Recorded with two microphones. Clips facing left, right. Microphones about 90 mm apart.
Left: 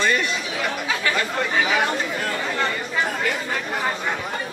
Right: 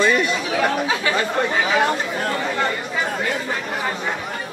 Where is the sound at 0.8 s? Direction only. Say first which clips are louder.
Right 2 dB; 20° right (ahead or behind).